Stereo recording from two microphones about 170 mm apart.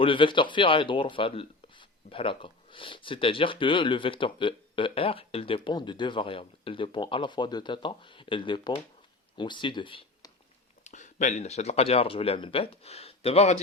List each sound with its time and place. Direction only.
0.0 s speech: 30° left (ahead or behind)
10.8 s speech: 45° left (ahead or behind)